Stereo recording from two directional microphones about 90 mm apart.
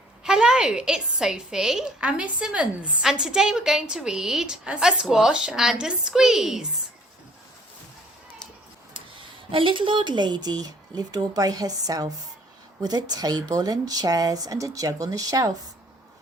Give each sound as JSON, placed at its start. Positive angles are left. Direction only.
{"t": 0.3, "sound": "a woman's voice", "side_deg": -10}
{"t": 9.5, "sound": "speech", "side_deg": -75}